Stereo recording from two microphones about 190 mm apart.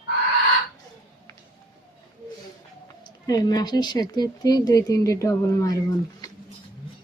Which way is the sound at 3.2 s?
20° left (ahead or behind).